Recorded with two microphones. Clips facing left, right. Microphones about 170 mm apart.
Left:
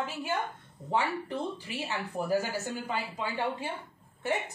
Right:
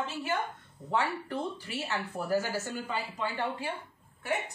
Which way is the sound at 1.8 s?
15° left (ahead or behind).